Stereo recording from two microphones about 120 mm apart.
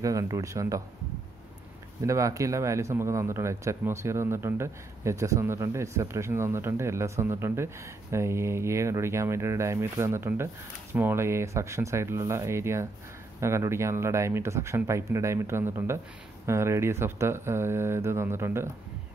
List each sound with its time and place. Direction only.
0.0 s speech: 30° right (ahead or behind)
2.0 s speech: 25° right (ahead or behind)